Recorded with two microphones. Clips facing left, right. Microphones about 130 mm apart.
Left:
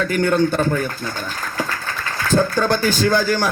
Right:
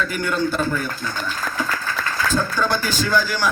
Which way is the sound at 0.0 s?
50° left (ahead or behind).